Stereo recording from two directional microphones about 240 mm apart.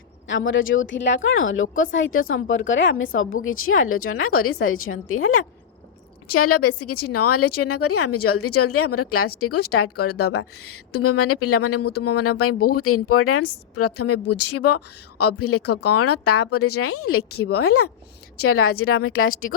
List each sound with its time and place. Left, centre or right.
0.3 s a woman's voice: left
6.2 s speech: left